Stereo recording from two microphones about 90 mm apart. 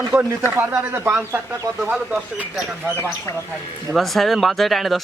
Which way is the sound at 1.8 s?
10° right (ahead or behind).